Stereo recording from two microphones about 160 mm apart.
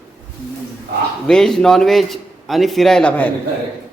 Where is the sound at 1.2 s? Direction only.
5° left (ahead or behind).